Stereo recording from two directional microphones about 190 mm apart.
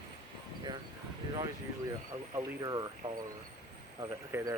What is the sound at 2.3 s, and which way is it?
Speech, 20° right (ahead or behind).